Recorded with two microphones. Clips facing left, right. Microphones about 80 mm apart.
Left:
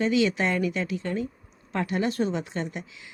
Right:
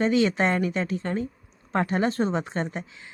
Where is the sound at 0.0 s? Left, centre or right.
Right.